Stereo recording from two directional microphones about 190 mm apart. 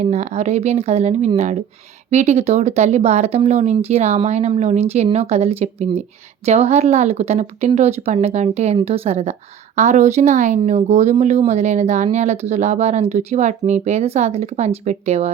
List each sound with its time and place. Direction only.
0.0 s speech: 35° right (ahead or behind)